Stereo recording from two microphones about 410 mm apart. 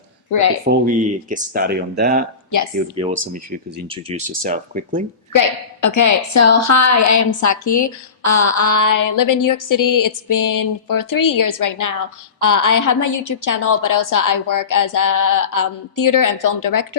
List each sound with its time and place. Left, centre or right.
0.9 s speech: centre
5.3 s a woman's voice: left